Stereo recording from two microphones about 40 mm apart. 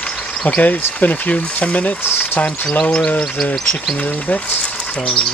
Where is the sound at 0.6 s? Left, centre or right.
Left.